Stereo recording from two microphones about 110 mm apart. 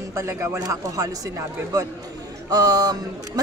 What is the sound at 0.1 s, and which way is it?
Speech, 25° right (ahead or behind).